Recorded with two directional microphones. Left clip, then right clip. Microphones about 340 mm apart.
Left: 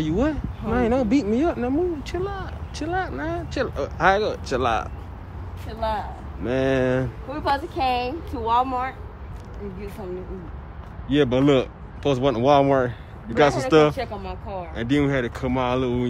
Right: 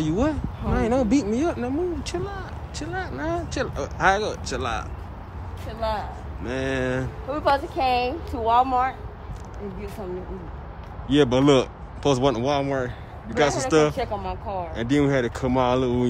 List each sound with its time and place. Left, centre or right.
0.0 s speech: centre
11.1 s speech: centre